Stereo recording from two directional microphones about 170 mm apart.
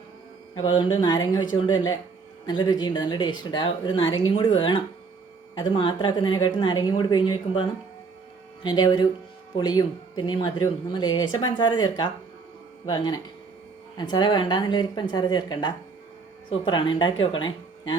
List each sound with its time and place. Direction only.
0.6 s speech: 25° left (ahead or behind)
2.5 s speech: 25° left (ahead or behind)
8.6 s speech: 25° left (ahead or behind)